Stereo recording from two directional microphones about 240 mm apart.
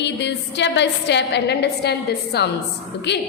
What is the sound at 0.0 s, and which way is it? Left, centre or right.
A woman's voice, left.